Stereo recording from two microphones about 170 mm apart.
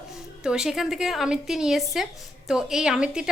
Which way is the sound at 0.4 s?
5° right (ahead or behind).